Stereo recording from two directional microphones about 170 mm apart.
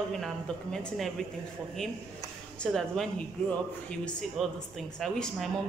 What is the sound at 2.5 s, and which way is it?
Speech, centre (ahead or behind).